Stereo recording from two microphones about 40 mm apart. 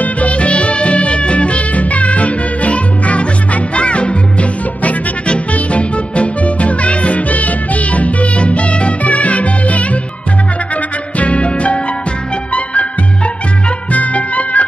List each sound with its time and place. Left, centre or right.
0.0 s music: left
11.1 s music: left